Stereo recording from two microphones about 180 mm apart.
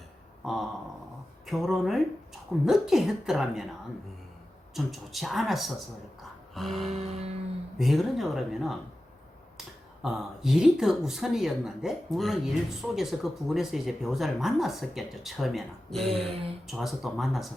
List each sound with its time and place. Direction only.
0.4 s speech: centre (ahead or behind)
4.7 s speech: centre (ahead or behind)
6.5 s music: centre (ahead or behind)
6.9 s music: 35° right (ahead or behind)
7.8 s speech: centre (ahead or behind)